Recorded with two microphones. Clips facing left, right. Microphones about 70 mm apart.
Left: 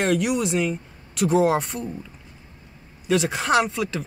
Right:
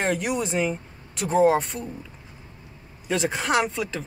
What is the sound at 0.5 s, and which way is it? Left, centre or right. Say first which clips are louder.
Speech: left 1 dB; centre.